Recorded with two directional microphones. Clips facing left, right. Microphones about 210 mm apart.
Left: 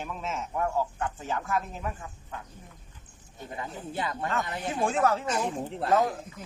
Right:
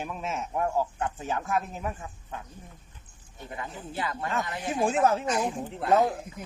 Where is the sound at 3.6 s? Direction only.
25° left (ahead or behind).